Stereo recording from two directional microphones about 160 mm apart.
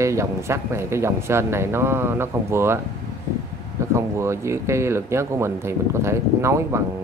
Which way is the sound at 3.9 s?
15° right (ahead or behind).